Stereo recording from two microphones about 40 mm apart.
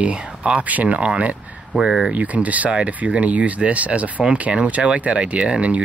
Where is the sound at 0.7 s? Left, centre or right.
Right.